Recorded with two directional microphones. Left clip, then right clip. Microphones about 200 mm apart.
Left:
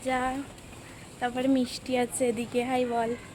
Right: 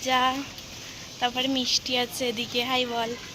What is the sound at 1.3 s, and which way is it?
Speech, 40° left (ahead or behind).